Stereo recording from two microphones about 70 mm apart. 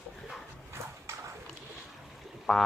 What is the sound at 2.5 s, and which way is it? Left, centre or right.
Speech, centre.